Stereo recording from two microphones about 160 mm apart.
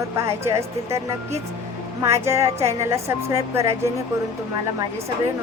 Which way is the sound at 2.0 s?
15° right (ahead or behind).